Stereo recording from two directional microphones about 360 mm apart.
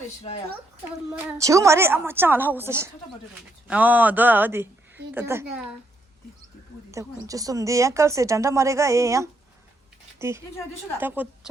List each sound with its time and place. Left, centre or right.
0.2 s speech: centre
1.1 s a woman's voice: centre
6.9 s a woman's voice: centre